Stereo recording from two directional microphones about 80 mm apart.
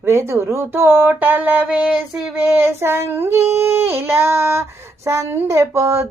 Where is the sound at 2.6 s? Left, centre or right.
Right.